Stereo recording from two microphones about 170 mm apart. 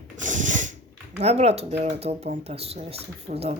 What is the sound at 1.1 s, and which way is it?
Speech, 40° right (ahead or behind).